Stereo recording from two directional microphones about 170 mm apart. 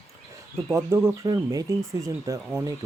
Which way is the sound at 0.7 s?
15° right (ahead or behind).